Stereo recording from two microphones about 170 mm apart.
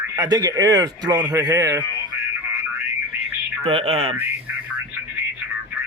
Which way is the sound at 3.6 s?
35° right (ahead or behind).